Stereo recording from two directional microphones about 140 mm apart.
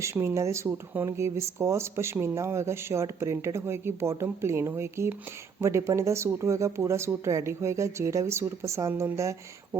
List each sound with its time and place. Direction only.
0.0 s speech: 20° right (ahead or behind)